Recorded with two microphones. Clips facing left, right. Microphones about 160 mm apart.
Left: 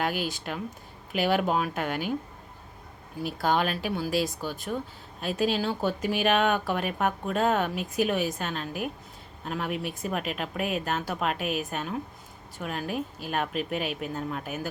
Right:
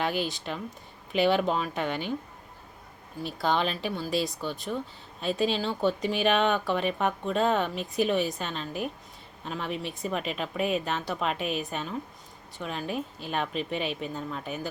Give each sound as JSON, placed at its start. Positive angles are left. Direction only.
{"t": 0.0, "sound": "speech", "side_deg": 5}
{"t": 3.2, "sound": "speech", "side_deg": 5}